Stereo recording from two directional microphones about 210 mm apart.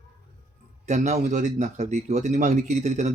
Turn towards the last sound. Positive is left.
turn(degrees=-35)  # may be behind; listen again after turning